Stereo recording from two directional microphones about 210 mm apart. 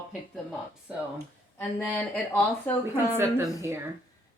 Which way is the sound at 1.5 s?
5° left (ahead or behind).